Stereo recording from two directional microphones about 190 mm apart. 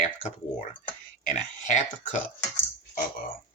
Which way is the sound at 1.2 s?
40° left (ahead or behind).